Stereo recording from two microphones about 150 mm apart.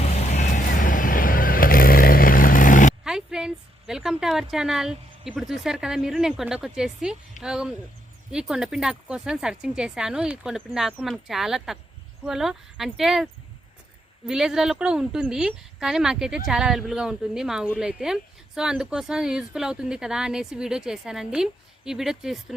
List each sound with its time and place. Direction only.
0.0 s vehicle: 50° left (ahead or behind)
3.0 s a sound: 5° right (ahead or behind)
5.3 s speech: centre (ahead or behind)
14.3 s speech: 5° right (ahead or behind)